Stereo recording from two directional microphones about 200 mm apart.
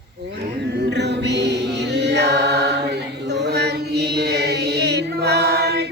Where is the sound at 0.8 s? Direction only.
55° right (ahead or behind).